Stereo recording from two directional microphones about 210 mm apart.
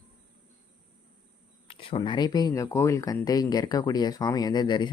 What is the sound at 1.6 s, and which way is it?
Speech, 25° left (ahead or behind).